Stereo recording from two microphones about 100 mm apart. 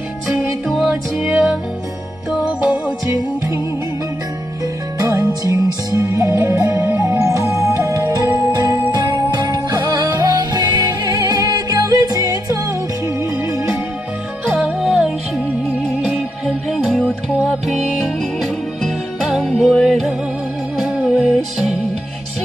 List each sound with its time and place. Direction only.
0.7 s music: centre (ahead or behind)
3.1 s music: 30° right (ahead or behind)
4.9 s music: 35° right (ahead or behind)
6.8 s music: 20° right (ahead or behind); by 8.3 s 35° right (ahead or behind)
8.5 s jingle bell: 35° right (ahead or behind)
8.9 s music: 45° right (ahead or behind)
14.6 s music: 5° right (ahead or behind)